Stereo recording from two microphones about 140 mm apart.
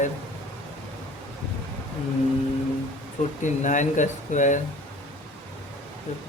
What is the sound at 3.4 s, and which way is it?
Speech, 60° left (ahead or behind).